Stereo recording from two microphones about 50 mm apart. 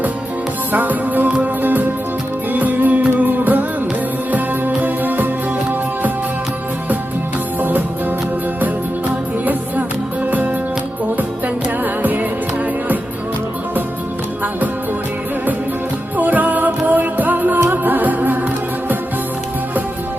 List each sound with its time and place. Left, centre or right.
0.7 s music: right
2.5 s music: right
9.4 s music: right
11.8 s music: right
16.1 s music: right